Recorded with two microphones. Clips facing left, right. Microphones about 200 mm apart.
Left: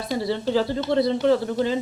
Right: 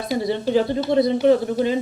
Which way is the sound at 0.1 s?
15° right (ahead or behind).